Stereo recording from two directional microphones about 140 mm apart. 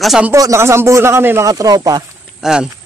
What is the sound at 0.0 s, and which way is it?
Speech, 5° right (ahead or behind).